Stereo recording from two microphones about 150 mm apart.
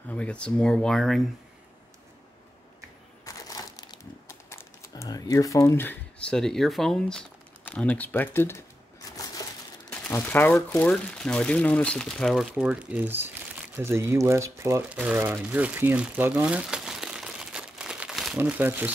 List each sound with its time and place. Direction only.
0.1 s speech: 10° left (ahead or behind)
3.3 s crumpling: 25° left (ahead or behind)
9.1 s crushing: 25° left (ahead or behind)
9.8 s speech: 10° left (ahead or behind)
18.4 s speech: 15° right (ahead or behind)